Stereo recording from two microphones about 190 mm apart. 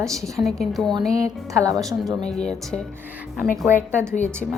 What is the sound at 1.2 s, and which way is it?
Speech, 15° right (ahead or behind).